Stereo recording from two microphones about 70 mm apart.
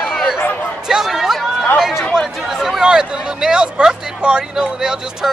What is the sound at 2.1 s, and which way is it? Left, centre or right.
Speech, centre.